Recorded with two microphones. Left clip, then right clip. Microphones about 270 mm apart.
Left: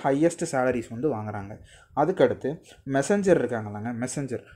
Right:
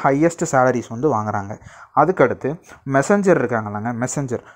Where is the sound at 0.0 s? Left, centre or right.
Right.